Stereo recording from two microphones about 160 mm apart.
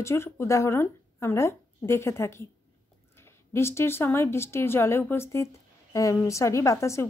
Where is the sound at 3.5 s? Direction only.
15° left (ahead or behind).